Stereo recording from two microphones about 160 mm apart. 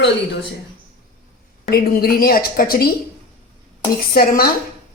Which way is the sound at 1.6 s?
70° left (ahead or behind).